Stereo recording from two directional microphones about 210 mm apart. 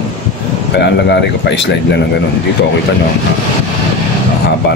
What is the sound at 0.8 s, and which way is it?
Speech, 55° left (ahead or behind).